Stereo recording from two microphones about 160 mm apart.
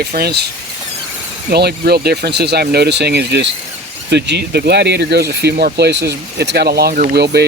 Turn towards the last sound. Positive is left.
turn(degrees=-90)